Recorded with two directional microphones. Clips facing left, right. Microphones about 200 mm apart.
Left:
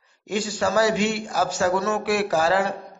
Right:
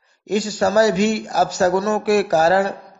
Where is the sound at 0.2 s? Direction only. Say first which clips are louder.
Right 5 dB; 40° right (ahead or behind).